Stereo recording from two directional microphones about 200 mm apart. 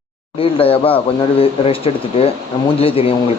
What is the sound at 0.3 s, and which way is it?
Speech, 30° left (ahead or behind).